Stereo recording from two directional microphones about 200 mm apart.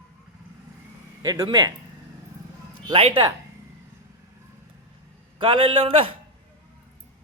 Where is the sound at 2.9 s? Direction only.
25° right (ahead or behind).